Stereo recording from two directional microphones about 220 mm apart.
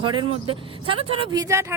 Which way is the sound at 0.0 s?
20° right (ahead or behind).